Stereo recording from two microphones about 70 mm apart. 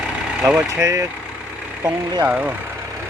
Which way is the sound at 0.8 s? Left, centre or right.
Right.